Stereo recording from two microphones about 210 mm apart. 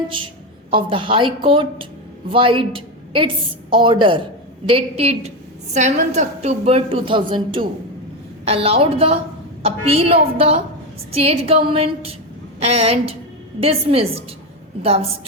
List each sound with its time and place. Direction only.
0.7 s a woman's voice: 25° right (ahead or behind)